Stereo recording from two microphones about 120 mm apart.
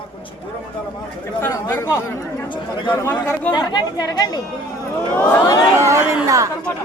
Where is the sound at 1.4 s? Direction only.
20° left (ahead or behind).